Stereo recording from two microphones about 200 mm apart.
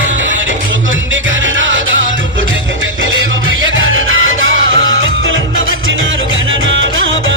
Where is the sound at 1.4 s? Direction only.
70° right (ahead or behind).